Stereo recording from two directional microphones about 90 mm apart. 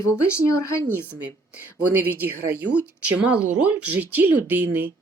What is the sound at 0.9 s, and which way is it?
A woman's voice, 20° right (ahead or behind).